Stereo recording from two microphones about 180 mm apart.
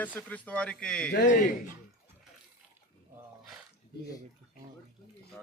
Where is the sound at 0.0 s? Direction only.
10° left (ahead or behind).